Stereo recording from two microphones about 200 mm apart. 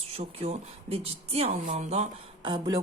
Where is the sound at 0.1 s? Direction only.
30° right (ahead or behind).